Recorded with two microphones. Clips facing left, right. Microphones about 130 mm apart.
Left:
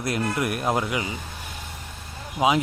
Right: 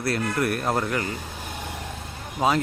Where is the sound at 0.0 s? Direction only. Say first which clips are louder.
Right 1 dB; 15° left (ahead or behind).